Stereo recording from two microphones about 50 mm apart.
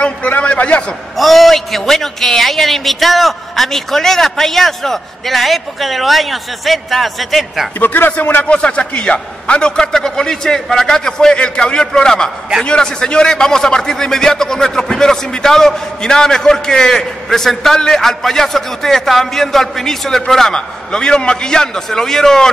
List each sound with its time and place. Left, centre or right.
0.3 s a man's voice: left
1.1 s a man's voice: centre
7.8 s speech: left
8.5 s a man's voice: left